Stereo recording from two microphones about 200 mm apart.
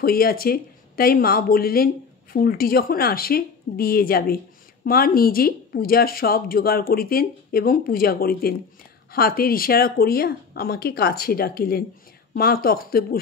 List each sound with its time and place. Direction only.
0.0 s speech: 50° left (ahead or behind)